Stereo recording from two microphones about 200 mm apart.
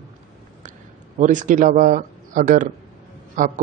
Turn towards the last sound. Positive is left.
turn(degrees=-40)  # may be behind; listen again after turning